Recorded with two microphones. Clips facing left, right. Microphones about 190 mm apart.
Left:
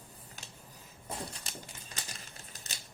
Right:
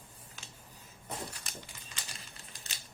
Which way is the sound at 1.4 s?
35° left (ahead or behind).